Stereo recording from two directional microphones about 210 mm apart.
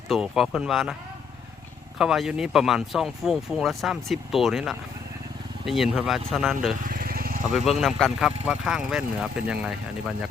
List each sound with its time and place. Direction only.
0.1 s speech: centre (ahead or behind)
2.0 s speech: centre (ahead or behind)
6.8 s vehicle: 45° right (ahead or behind)
7.5 s speech: centre (ahead or behind)